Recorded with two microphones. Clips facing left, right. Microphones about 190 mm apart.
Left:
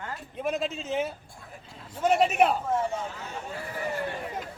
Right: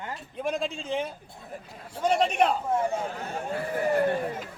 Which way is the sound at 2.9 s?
55° right (ahead or behind).